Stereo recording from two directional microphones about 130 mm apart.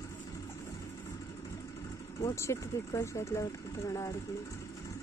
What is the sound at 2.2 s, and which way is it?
Speech, 20° left (ahead or behind).